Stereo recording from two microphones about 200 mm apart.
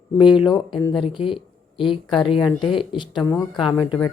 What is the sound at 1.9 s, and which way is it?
Speech, centre (ahead or behind).